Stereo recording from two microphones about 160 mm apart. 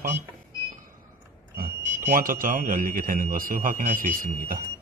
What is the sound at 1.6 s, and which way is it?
Speech, 60° right (ahead or behind).